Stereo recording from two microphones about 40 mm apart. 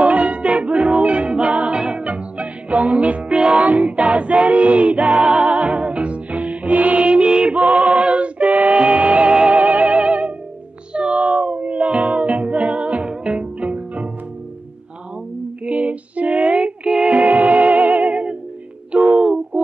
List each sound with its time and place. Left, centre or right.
0.0 s music: right
3.6 s music: right
5.2 s music: right
15.6 s music: right